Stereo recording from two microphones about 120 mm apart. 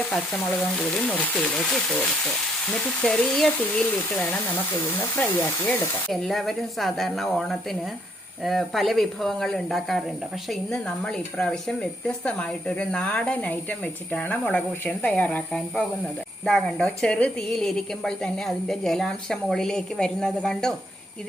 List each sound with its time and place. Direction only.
0.8 s a woman's voice: 10° left (ahead or behind)
6.1 s a woman's voice: centre (ahead or behind)